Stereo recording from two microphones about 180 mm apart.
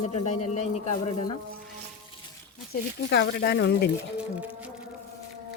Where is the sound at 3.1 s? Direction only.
70° left (ahead or behind).